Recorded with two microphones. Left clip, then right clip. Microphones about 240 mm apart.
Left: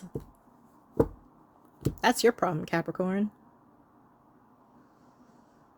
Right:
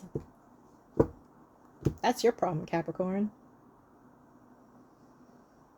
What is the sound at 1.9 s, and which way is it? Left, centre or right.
Speech, left.